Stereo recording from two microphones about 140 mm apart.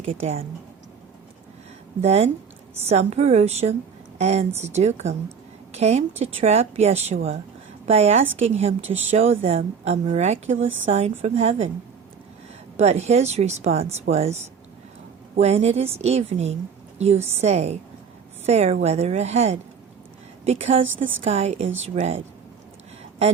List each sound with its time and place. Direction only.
0.2 s a woman's voice: 45° right (ahead or behind)
2.0 s a woman's voice: 50° right (ahead or behind)
12.7 s a woman's voice: 50° right (ahead or behind)